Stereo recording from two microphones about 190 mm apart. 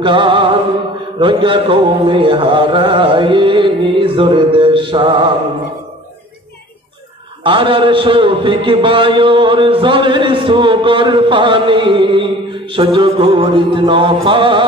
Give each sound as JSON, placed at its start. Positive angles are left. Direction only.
{"t": 0.0, "sound": "music", "side_deg": -25}
{"t": 1.2, "sound": "a man's voice", "side_deg": -25}
{"t": 7.4, "sound": "a man's voice", "side_deg": -25}